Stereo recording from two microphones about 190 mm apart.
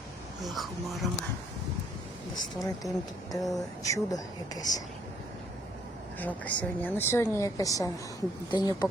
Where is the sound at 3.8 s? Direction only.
20° left (ahead or behind).